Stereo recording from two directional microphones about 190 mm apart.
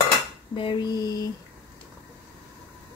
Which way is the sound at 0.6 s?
25° left (ahead or behind).